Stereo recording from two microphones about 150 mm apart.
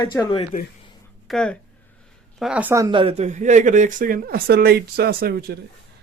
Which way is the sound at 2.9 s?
35° right (ahead or behind).